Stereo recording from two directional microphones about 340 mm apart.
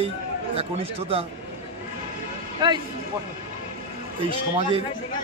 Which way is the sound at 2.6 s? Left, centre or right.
Centre.